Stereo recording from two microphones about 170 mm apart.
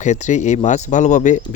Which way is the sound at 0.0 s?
45° left (ahead or behind).